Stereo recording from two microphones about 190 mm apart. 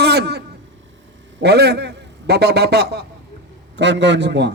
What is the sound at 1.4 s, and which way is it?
A man's voice, 60° right (ahead or behind).